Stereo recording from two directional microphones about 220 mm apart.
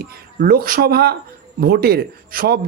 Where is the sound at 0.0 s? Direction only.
45° right (ahead or behind).